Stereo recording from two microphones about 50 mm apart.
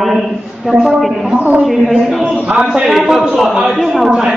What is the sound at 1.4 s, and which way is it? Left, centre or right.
Music, right.